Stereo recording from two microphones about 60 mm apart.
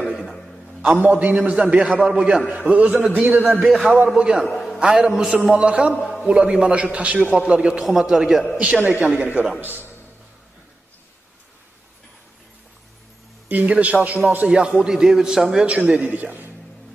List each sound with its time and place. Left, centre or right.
0.0 s a sound: centre
1.0 s a man's voice: right
3.6 s a man's voice: centre
4.2 s a man's voice: centre
4.5 s a sound: centre
4.7 s a man's voice: centre
7.8 s a man's voice: centre
9.2 s a man's voice: right
13.5 s a man's voice: right; by 15.6 s centre
15.6 s a man's voice: right